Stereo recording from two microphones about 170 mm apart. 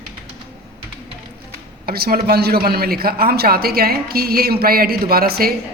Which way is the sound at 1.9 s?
65° right (ahead or behind).